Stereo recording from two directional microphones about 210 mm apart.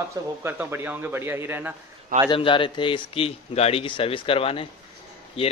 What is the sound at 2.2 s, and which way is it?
Speech, 25° left (ahead or behind).